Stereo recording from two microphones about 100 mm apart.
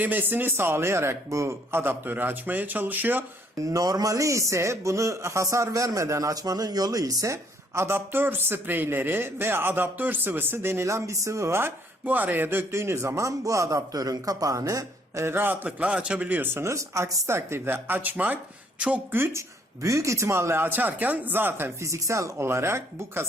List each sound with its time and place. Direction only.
0.0 s a man's voice: 20° right (ahead or behind)
3.6 s a man's voice: 35° right (ahead or behind)
7.8 s a man's voice: 25° right (ahead or behind)